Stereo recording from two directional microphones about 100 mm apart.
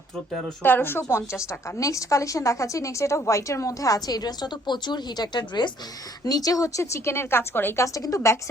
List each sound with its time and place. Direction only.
0.6 s a woman's voice: 20° left (ahead or behind)
1.8 s a woman's voice: 30° left (ahead or behind)